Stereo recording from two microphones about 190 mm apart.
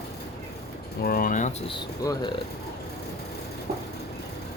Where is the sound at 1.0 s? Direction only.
50° left (ahead or behind).